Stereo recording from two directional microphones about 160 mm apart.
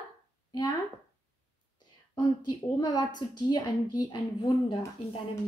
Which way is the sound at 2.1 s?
25° left (ahead or behind).